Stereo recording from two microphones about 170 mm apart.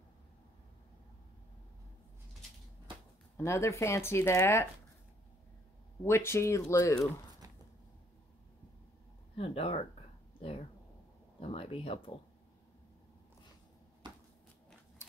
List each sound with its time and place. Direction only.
3.3 s speech: 15° left (ahead or behind)
6.0 s speech: 15° left (ahead or behind)
9.4 s speech: 35° left (ahead or behind)
11.4 s speech: 30° left (ahead or behind)